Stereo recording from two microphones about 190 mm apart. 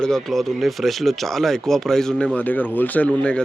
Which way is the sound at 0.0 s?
Centre (ahead or behind).